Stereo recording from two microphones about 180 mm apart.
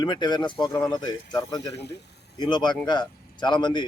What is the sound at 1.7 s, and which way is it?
Speech, 70° left (ahead or behind).